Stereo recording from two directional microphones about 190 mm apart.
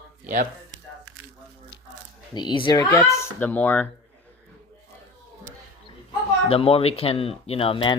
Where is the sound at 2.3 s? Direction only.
25° left (ahead or behind).